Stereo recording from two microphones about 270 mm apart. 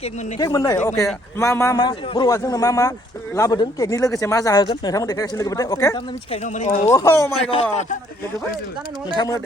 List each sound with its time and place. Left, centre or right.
0.3 s speech: centre
6.3 s speech: left
6.9 s speech: centre
7.3 s speech: left
9.1 s speech: centre